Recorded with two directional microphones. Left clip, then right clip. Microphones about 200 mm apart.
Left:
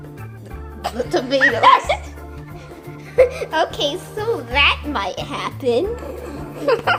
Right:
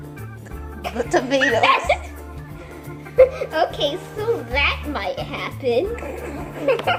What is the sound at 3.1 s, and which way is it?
A child's voice, 45° left (ahead or behind).